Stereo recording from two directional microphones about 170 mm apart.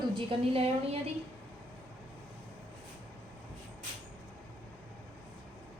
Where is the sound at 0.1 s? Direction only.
35° right (ahead or behind).